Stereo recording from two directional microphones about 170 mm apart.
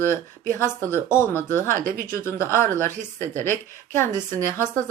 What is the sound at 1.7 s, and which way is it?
Speech, 55° right (ahead or behind).